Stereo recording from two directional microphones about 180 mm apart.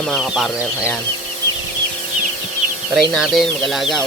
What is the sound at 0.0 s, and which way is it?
Speech, centre (ahead or behind).